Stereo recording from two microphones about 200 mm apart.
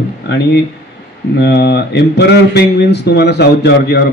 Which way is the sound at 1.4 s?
55° left (ahead or behind).